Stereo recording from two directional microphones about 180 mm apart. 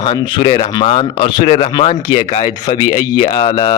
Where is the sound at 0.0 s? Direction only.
25° left (ahead or behind).